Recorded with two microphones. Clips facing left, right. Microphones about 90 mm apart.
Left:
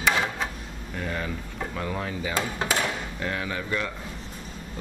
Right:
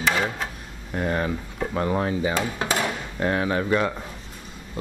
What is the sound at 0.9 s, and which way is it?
Speech, 35° right (ahead or behind).